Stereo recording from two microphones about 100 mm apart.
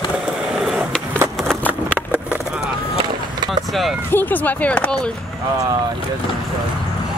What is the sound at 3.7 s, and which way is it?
Speech, centre (ahead or behind).